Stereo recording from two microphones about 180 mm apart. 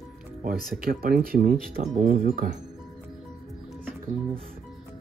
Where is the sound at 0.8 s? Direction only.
55° right (ahead or behind).